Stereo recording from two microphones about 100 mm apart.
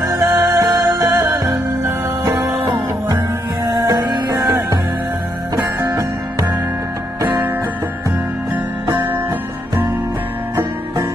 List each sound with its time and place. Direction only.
0.2 s music: 15° right (ahead or behind)
0.5 s music: 30° right (ahead or behind)
3.6 s music: 35° right (ahead or behind)
5.8 s music: 30° right (ahead or behind)
8.9 s music: 25° right (ahead or behind)